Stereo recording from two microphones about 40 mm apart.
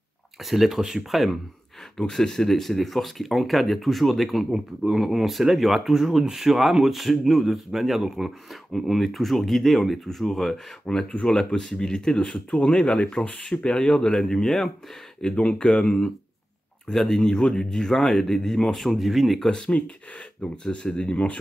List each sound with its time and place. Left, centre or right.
0.5 s speech: centre
2.0 s speech: centre
11.0 s speech: centre
15.4 s speech: left
17.2 s speech: left; by 19.4 s centre
19.4 s speech: centre